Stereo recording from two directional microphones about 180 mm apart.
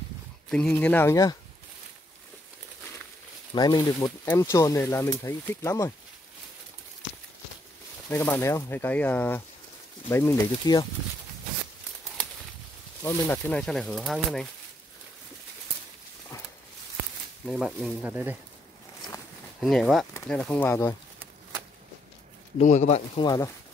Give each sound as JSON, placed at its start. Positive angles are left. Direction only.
{"t": 0.5, "sound": "speech", "side_deg": 5}
{"t": 3.5, "sound": "speech", "side_deg": 20}
{"t": 8.1, "sound": "speech", "side_deg": 10}
{"t": 13.0, "sound": "speech", "side_deg": 10}
{"t": 17.5, "sound": "speech", "side_deg": -5}
{"t": 19.6, "sound": "speech", "side_deg": 0}
{"t": 22.6, "sound": "speech", "side_deg": 40}
{"t": 23.2, "sound": "speech", "side_deg": 20}